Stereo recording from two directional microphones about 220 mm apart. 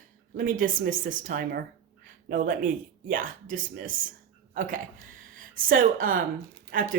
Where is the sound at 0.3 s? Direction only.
40° right (ahead or behind).